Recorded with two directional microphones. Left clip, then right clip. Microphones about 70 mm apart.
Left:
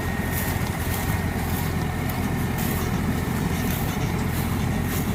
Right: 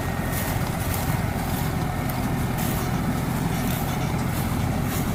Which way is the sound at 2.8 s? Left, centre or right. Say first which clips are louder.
Even; right.